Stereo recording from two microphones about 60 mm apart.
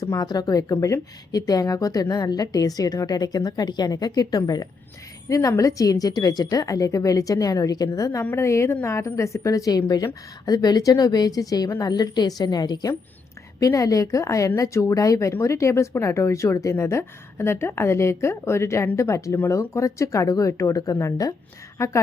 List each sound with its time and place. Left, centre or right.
0.2 s speech: left
1.3 s a woman's voice: left
5.3 s a woman's voice: left
8.4 s a woman's voice: left
13.6 s a woman's voice: left
20.5 s a woman's voice: left